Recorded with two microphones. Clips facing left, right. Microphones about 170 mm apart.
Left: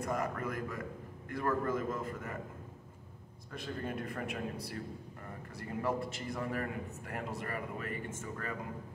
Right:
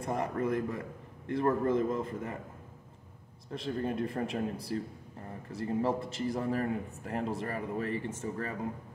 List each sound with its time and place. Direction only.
0.0 s a man's voice: 25° right (ahead or behind)
3.5 s a man's voice: 25° right (ahead or behind)